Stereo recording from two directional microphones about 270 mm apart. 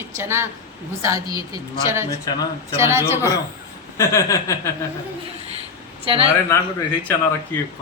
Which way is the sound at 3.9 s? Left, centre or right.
Centre.